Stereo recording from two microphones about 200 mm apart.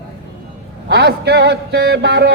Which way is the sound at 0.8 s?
55° right (ahead or behind).